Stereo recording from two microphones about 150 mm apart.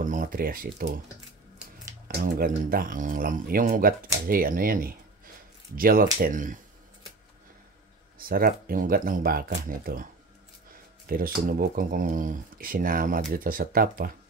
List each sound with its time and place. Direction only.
0.0 s speech: 65° right (ahead or behind)
2.0 s speech: 75° right (ahead or behind)
6.2 s speech: 60° right (ahead or behind)
8.2 s speech: 75° right (ahead or behind)
11.1 s speech: 75° right (ahead or behind)